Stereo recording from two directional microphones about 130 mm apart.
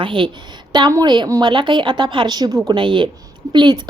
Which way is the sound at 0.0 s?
40° right (ahead or behind).